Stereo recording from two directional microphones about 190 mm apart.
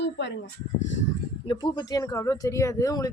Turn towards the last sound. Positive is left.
turn(degrees=20)  # may be behind; listen again after turning